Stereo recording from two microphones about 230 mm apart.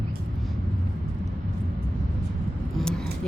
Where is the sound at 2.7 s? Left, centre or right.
Centre.